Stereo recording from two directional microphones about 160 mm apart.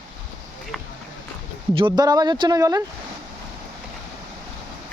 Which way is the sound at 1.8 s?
30° right (ahead or behind).